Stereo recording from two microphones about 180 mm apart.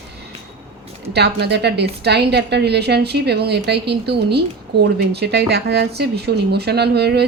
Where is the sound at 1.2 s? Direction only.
65° right (ahead or behind).